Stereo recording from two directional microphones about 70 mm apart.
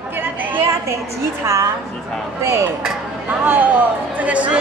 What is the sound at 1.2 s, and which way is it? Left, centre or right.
Speech, right.